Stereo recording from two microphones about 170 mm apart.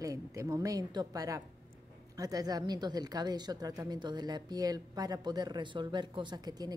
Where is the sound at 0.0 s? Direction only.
20° right (ahead or behind).